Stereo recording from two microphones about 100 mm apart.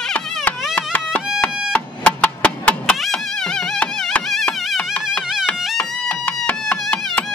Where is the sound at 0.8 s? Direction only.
15° left (ahead or behind).